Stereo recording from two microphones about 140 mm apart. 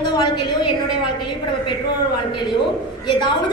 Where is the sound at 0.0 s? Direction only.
35° left (ahead or behind).